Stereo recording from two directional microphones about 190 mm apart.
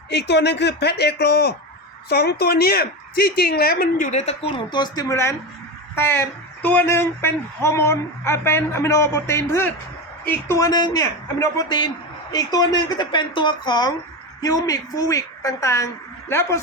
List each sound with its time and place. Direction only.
0.1 s a woman's voice: 60° left (ahead or behind); by 16.6 s 15° left (ahead or behind)